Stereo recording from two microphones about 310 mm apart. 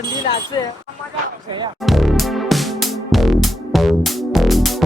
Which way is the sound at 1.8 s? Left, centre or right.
Centre.